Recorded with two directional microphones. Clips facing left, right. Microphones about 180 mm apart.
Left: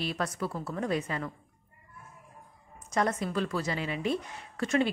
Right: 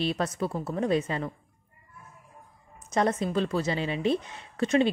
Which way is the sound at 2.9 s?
25° right (ahead or behind).